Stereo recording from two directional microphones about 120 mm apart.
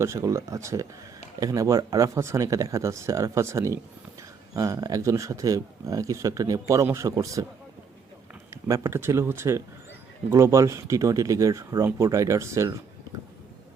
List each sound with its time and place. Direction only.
0.0 s speech: 25° right (ahead or behind)
8.6 s speech: 25° right (ahead or behind)